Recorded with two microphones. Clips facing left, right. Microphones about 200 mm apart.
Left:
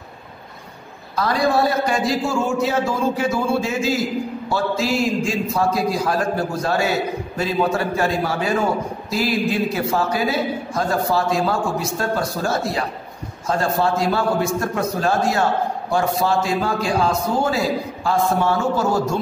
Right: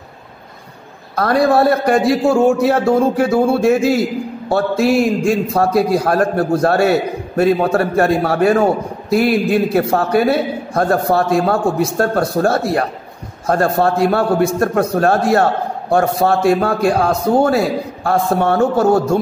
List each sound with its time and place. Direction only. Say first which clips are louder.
1.1 s a man's voice: right 6 dB; 60° right (ahead or behind)